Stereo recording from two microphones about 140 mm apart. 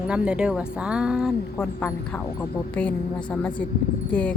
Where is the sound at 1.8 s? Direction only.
15° left (ahead or behind).